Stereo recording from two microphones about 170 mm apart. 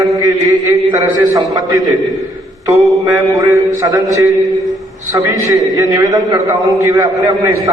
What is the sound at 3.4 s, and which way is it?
Speech, 20° right (ahead or behind).